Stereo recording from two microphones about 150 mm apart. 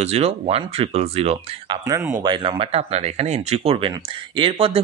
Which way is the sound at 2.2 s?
30° right (ahead or behind).